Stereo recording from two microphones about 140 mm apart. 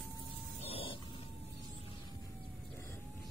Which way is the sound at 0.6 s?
40° left (ahead or behind).